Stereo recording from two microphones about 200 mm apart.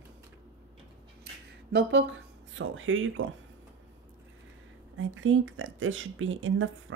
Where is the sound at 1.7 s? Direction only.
60° right (ahead or behind); by 3.1 s 80° right.